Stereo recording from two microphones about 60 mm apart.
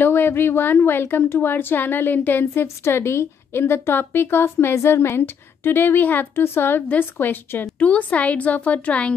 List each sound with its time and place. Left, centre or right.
0.0 s speech: left
4.7 s speech: left
7.8 s a woman's voice: left